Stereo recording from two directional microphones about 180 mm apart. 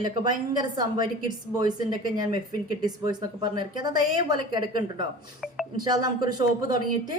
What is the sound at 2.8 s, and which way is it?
A woman's voice, 20° right (ahead or behind).